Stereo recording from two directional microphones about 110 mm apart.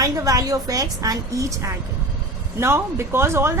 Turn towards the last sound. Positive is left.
turn(degrees=-25)  # may be behind; listen again after turning